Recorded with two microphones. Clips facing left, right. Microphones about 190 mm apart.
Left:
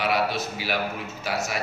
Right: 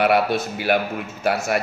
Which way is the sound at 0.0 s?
55° right (ahead or behind).